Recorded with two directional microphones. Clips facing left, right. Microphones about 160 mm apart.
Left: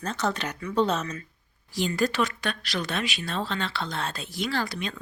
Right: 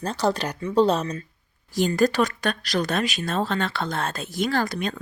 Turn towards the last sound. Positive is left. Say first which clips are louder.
# right 5 dB
turn(degrees=-45)  # may be behind; listen again after turning